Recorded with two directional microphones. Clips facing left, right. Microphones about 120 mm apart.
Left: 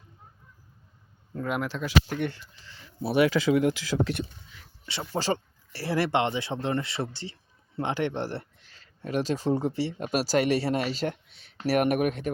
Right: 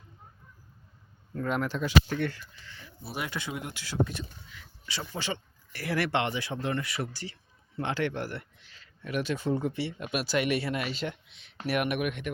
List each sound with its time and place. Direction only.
1.3 s speech: 10° left (ahead or behind)
2.0 s speech: 15° left (ahead or behind)
2.3 s speech: 25° left (ahead or behind)
3.0 s speech: 70° left (ahead or behind)
5.1 s speech: 35° left (ahead or behind)